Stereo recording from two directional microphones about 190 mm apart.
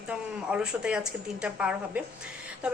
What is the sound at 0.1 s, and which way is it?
A woman's voice, 5° right (ahead or behind).